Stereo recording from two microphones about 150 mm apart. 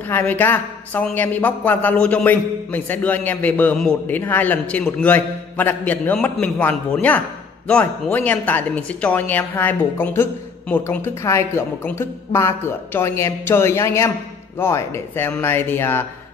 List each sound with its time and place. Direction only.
0.1 s a man's voice: 15° left (ahead or behind)